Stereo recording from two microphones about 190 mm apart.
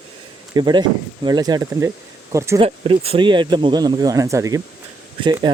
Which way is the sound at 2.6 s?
30° right (ahead or behind).